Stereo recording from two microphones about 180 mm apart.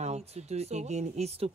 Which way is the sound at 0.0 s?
35° right (ahead or behind).